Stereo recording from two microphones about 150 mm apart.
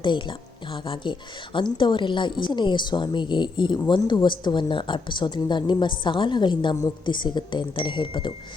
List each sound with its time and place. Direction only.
0.0 s a woman's voice: 35° left (ahead or behind)